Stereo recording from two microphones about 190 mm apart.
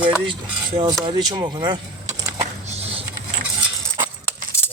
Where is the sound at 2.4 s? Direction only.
35° right (ahead or behind).